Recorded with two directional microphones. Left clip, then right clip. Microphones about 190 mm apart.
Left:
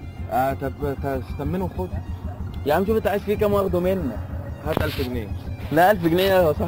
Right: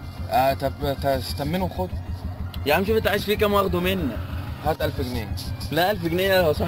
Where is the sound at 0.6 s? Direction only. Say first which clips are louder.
Right 3 dB; 10° right (ahead or behind).